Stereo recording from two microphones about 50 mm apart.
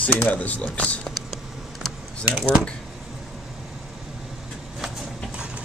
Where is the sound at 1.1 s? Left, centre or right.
Centre.